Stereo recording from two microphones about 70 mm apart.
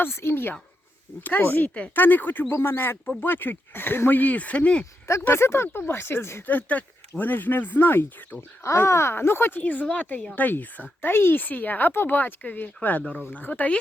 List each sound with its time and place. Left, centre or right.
0.0 s speech: left; by 4.9 s centre
5.2 s speech: left
6.5 s speech: left
9.6 s speech: left